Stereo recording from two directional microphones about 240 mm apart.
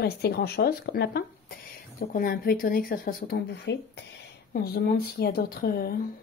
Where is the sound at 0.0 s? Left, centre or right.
Left.